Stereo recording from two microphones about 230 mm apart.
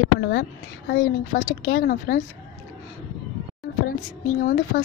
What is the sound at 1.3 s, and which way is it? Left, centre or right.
Speech, left.